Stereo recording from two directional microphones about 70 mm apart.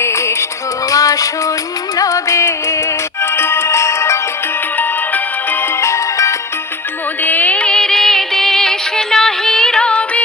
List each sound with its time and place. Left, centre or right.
0.9 s music: left
3.3 s music: left
5.8 s music: left
7.3 s music: left